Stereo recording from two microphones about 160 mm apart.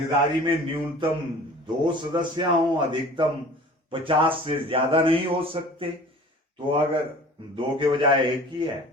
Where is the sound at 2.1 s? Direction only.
30° right (ahead or behind).